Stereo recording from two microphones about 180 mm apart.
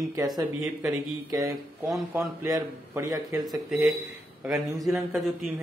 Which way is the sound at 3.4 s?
Centre (ahead or behind).